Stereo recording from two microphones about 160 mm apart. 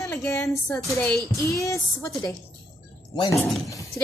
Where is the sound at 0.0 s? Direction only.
20° left (ahead or behind).